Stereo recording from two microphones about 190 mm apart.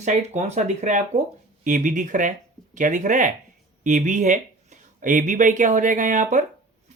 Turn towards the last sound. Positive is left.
turn(degrees=-40)  # may be behind; listen again after turning